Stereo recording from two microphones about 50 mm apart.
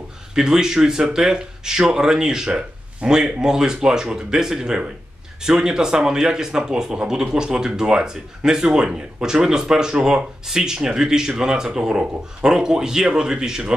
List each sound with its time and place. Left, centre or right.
0.3 s speech: centre